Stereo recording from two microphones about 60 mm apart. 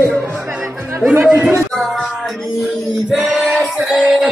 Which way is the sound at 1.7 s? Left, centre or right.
Centre.